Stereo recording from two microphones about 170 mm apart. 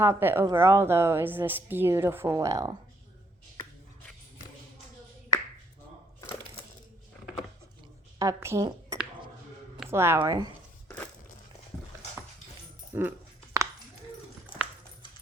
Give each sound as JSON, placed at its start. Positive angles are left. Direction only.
{"t": 0.0, "sound": "a woman's voice", "side_deg": -15}
{"t": 8.2, "sound": "a woman's voice", "side_deg": -15}
{"t": 10.8, "sound": "crushing", "side_deg": 10}
{"t": 12.9, "sound": "a sound", "side_deg": -15}